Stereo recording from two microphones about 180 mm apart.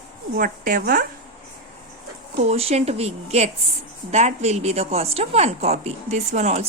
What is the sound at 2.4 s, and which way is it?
A woman's voice, 35° right (ahead or behind).